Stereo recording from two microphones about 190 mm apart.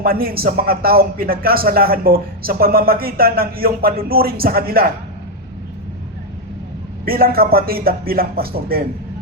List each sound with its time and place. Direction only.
0.0 s a man's voice: 50° right (ahead or behind)
7.0 s a man's voice: 50° right (ahead or behind)